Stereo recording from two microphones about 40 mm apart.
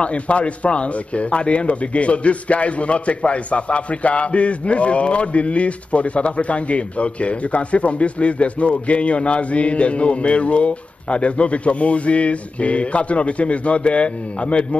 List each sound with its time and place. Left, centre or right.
0.0 s speech: left